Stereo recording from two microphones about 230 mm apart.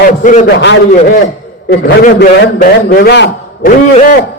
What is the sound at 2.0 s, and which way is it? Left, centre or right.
A man's voice, left.